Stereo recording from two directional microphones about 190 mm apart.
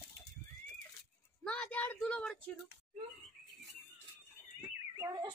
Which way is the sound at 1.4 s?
5° left (ahead or behind).